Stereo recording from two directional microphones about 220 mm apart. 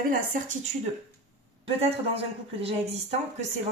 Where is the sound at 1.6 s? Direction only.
25° right (ahead or behind).